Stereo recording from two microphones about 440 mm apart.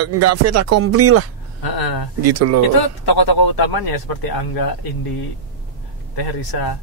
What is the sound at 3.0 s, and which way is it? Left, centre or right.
Speech, left.